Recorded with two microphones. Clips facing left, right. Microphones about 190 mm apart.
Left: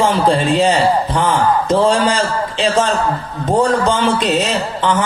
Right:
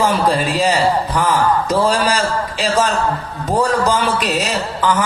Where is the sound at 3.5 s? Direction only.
30° left (ahead or behind).